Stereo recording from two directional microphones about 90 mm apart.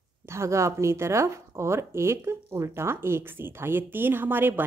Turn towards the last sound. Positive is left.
turn(degrees=-25)  # may be behind; listen again after turning